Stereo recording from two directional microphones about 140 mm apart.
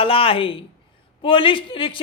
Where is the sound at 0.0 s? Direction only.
40° left (ahead or behind).